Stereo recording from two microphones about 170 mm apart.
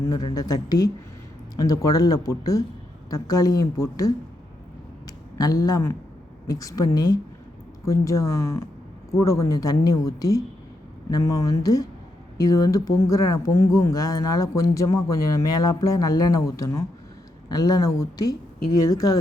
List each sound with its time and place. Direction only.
0.1 s speech: 25° left (ahead or behind)
5.4 s speech: 20° left (ahead or behind)